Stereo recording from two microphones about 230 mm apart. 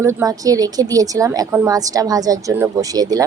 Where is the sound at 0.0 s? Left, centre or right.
Centre.